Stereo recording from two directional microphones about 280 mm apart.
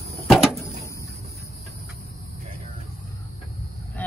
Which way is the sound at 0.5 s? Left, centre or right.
Centre.